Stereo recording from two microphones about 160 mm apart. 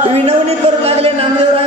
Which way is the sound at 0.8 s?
35° right (ahead or behind).